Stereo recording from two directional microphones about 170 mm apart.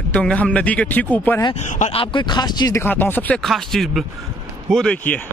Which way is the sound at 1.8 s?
35° left (ahead or behind).